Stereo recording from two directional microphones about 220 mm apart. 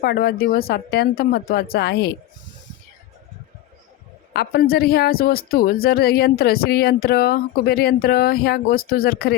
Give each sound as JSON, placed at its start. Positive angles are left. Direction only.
{"t": 0.0, "sound": "speech", "side_deg": 45}
{"t": 4.4, "sound": "speech", "side_deg": 45}